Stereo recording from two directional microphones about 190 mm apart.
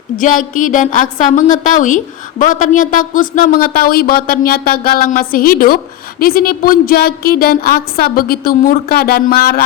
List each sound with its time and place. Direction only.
0.2 s speech: 45° left (ahead or behind)